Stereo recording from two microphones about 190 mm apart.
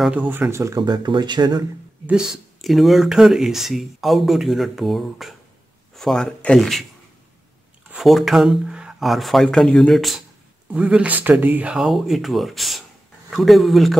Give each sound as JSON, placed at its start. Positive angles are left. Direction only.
{"t": 0.3, "sound": "speech", "side_deg": -10}
{"t": 2.0, "sound": "speech", "side_deg": -5}
{"t": 7.9, "sound": "speech", "side_deg": 0}